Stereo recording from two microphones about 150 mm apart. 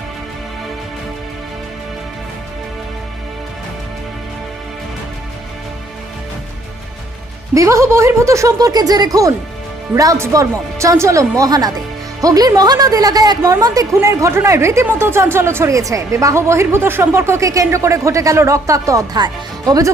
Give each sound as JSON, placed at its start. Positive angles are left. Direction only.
{"t": 7.5, "sound": "a woman's voice", "side_deg": -20}